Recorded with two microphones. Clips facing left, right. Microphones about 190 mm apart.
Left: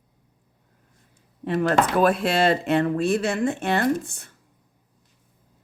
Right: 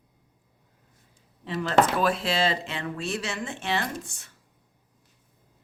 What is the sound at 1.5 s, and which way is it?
A woman's voice, 55° left (ahead or behind).